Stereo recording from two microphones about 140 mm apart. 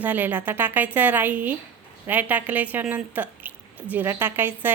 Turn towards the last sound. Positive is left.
turn(degrees=-15)  # may be behind; listen again after turning